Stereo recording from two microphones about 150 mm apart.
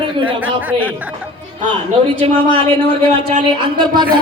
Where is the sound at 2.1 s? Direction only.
35° right (ahead or behind).